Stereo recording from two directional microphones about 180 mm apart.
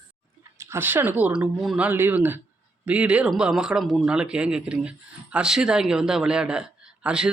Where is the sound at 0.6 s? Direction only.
15° right (ahead or behind).